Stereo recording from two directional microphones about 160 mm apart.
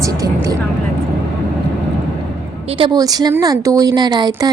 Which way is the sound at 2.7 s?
35° right (ahead or behind).